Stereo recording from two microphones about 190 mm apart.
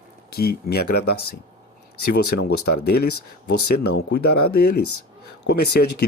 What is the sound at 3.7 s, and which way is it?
Speech, 60° left (ahead or behind).